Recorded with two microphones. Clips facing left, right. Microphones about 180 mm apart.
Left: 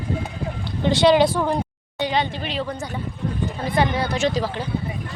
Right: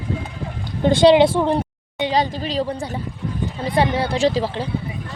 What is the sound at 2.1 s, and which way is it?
Speech, 40° right (ahead or behind).